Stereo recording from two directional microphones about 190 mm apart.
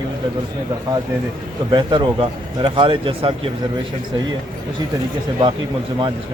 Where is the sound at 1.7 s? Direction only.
25° right (ahead or behind).